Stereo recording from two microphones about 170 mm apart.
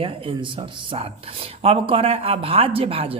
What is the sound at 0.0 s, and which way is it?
A woman's voice, 30° right (ahead or behind).